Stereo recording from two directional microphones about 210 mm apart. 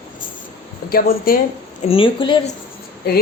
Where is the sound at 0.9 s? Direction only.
45° left (ahead or behind).